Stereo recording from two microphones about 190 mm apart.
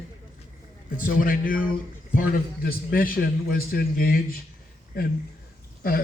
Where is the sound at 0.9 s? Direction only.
45° left (ahead or behind).